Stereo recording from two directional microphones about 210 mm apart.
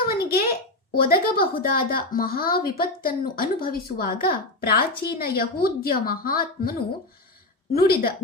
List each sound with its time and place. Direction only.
0.1 s speech: 45° left (ahead or behind)